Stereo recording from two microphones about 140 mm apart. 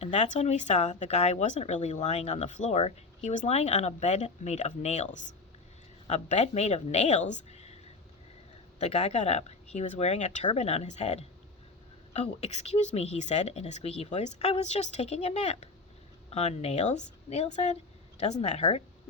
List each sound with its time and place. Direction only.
0.0 s speech: 55° left (ahead or behind)
8.8 s speech: 50° left (ahead or behind)